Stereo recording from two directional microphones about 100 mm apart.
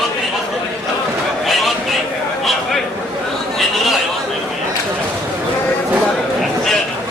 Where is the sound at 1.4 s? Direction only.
Centre (ahead or behind).